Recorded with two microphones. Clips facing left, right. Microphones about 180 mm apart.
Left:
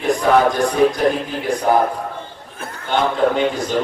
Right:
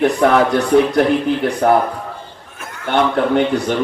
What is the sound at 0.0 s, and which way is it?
A man's voice, 65° right (ahead or behind).